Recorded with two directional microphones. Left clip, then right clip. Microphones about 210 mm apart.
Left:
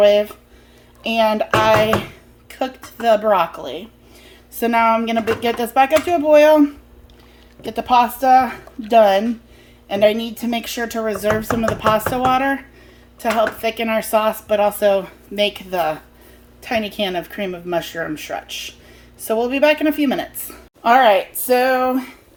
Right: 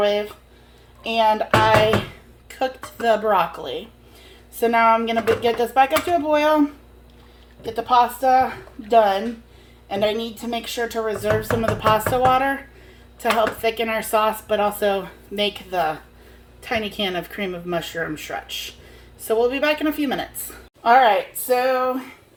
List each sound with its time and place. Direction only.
0.0 s a woman's voice: 40° left (ahead or behind)
20.8 s speech: 40° left (ahead or behind)